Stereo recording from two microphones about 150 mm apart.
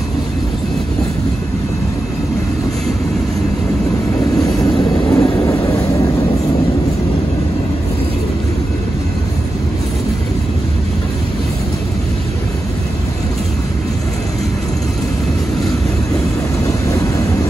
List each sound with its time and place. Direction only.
4.4 s train: 25° left (ahead or behind)
16.6 s vehicle: 20° left (ahead or behind)